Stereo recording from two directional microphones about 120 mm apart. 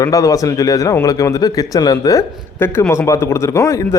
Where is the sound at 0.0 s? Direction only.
30° left (ahead or behind).